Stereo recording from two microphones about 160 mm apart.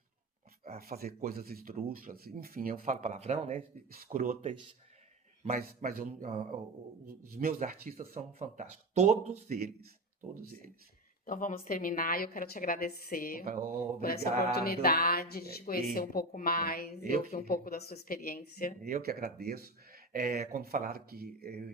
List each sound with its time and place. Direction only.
0.8 s speech: 70° right (ahead or behind); by 3.6 s 45° right (ahead or behind)
3.9 s speech: 60° right (ahead or behind)
5.5 s speech: 65° right (ahead or behind)
6.1 s speech: 55° right (ahead or behind)
8.1 s speech: 40° right (ahead or behind)
11.3 s a woman's voice: 55° left (ahead or behind)
17.0 s speech: 60° right (ahead or behind)
17.3 s speech: 65° left (ahead or behind)
18.8 s speech: 65° right (ahead or behind)